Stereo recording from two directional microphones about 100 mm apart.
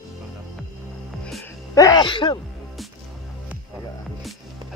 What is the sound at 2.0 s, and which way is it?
Speech, 55° left (ahead or behind).